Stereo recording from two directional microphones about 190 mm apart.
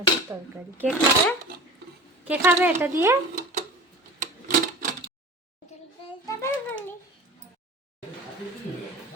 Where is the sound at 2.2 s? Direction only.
10° right (ahead or behind).